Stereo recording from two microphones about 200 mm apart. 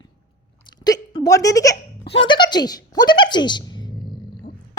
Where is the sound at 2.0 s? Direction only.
65° left (ahead or behind).